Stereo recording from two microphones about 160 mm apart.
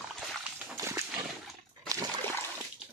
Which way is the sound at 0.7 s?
20° right (ahead or behind).